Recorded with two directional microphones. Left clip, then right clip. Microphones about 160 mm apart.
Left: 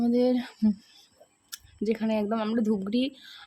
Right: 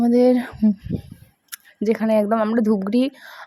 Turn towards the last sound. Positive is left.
turn(degrees=-15)  # may be behind; listen again after turning